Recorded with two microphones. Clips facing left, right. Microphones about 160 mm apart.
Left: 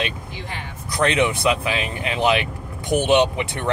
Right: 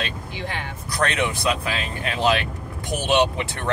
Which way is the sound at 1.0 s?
25° left (ahead or behind).